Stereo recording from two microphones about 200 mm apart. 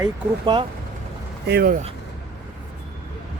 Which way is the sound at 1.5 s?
50° right (ahead or behind).